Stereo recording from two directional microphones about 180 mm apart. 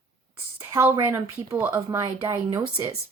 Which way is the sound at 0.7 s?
15° right (ahead or behind).